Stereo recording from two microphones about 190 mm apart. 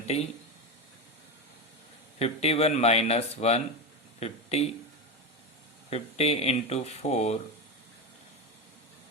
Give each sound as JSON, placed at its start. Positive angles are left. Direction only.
{"t": 2.1, "sound": "speech", "side_deg": 35}
{"t": 5.9, "sound": "speech", "side_deg": 35}